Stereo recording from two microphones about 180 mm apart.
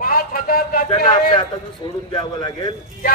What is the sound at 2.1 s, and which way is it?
Speech, 25° left (ahead or behind).